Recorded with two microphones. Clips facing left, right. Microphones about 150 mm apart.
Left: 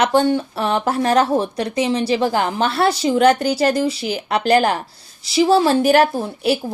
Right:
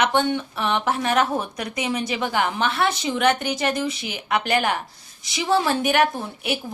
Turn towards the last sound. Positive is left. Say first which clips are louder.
# left 8 dB
turn(degrees=35)  # may be behind; listen again after turning